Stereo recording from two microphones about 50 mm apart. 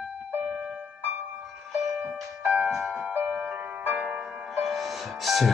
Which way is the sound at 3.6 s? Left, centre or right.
Right.